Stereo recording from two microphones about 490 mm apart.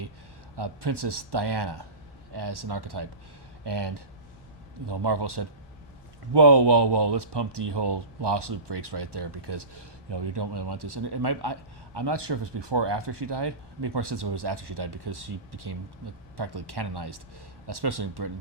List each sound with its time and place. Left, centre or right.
0.5 s speech: right